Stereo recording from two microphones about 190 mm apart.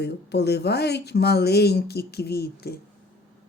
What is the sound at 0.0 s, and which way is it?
Speech, 60° left (ahead or behind).